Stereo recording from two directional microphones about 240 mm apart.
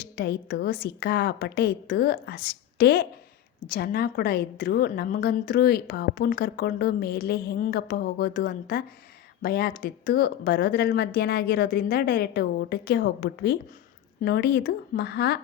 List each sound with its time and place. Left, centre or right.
0.0 s a woman's voice: left